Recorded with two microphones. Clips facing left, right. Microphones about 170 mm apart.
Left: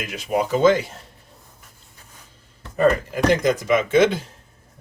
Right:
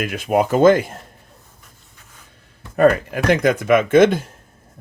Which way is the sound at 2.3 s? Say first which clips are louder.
Right 5 dB; 60° right (ahead or behind).